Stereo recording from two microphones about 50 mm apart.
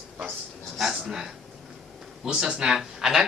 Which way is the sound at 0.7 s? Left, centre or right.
Centre.